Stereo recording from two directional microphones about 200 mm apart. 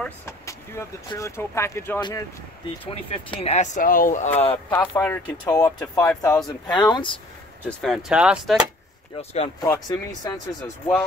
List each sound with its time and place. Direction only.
0.0 s speech: 10° left (ahead or behind); by 4.3 s 40° left (ahead or behind)
4.4 s speech: 30° left (ahead or behind)
4.7 s speech: 15° left (ahead or behind)
7.8 s speech: centre (ahead or behind)
9.6 s speech: 20° left (ahead or behind)